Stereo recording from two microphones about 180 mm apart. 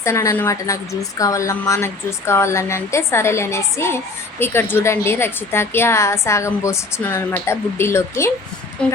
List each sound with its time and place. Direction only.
0.0 s a woman's voice: 15° left (ahead or behind)